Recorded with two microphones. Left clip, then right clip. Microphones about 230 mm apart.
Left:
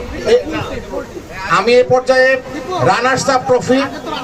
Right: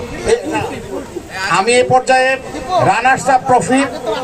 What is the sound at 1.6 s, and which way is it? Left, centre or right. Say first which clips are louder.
Speech: left 1 dB; left.